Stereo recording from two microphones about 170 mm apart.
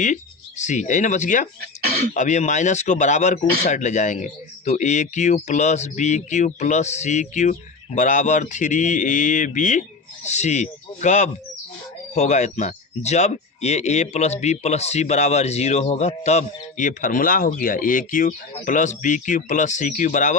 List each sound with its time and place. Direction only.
0.0 s speech: 45° left (ahead or behind)